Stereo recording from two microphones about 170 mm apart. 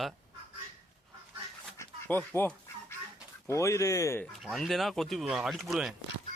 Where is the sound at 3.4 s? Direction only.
15° left (ahead or behind).